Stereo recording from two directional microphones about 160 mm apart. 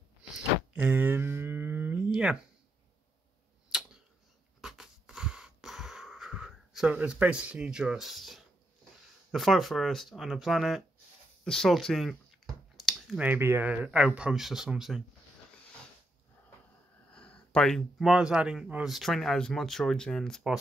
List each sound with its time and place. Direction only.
0.7 s a sound: 10° right (ahead or behind)
2.1 s speech: 5° right (ahead or behind)
4.6 s wheeze: 5° right (ahead or behind)
9.3 s speech: centre (ahead or behind)
17.1 s speech: 5° left (ahead or behind)